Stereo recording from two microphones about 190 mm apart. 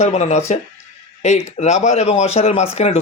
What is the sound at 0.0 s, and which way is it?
A man's voice, 35° left (ahead or behind).